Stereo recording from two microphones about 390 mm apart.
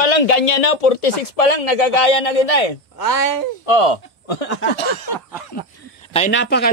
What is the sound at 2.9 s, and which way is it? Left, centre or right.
Speech, left.